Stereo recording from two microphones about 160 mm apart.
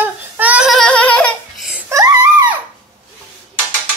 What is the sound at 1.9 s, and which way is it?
Screaming, 20° right (ahead or behind).